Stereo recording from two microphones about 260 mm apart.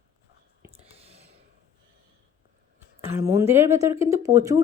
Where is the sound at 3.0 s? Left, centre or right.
Centre.